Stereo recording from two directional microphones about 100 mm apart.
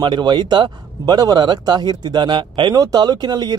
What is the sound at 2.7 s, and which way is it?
Speech, 40° right (ahead or behind).